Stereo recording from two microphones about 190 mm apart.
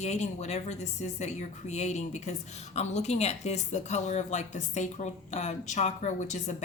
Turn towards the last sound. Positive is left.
turn(degrees=40)  # may be behind; listen again after turning